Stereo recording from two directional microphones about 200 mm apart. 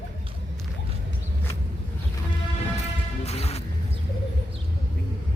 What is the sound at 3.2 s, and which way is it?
Music, 30° left (ahead or behind).